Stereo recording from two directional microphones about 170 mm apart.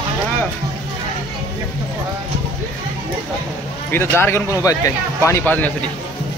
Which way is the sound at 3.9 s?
15° left (ahead or behind).